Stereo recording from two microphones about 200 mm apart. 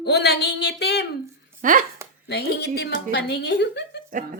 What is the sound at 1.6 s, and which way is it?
Speech, 40° right (ahead or behind).